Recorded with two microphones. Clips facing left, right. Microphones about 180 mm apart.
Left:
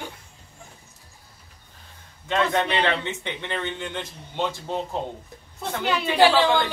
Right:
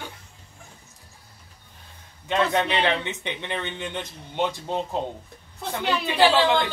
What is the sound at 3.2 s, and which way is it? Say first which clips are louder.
A man's voice: left 1 dB; 15° right (ahead or behind).